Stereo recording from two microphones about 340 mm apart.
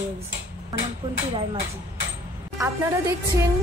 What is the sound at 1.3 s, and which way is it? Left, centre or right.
Speech, centre.